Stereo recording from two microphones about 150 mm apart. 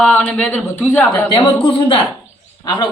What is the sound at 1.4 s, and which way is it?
A man's voice, 35° left (ahead or behind).